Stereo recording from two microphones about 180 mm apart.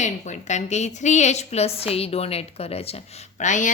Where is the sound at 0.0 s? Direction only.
40° left (ahead or behind).